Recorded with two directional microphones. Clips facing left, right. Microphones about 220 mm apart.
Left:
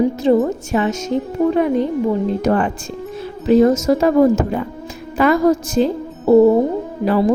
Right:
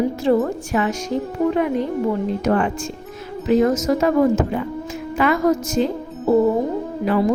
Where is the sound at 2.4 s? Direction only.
35° left (ahead or behind).